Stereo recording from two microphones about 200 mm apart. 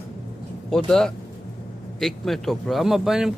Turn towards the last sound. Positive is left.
turn(degrees=-5)  # may be behind; listen again after turning